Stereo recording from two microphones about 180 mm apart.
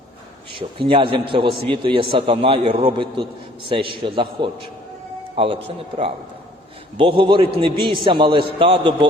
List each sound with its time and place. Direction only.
0.5 s a man's voice: 30° right (ahead or behind)